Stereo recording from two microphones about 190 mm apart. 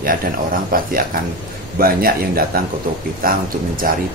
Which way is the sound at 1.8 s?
50° right (ahead or behind).